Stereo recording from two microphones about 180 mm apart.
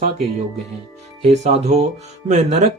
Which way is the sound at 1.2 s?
35° right (ahead or behind).